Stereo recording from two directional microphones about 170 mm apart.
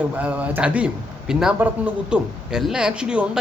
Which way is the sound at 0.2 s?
10° right (ahead or behind).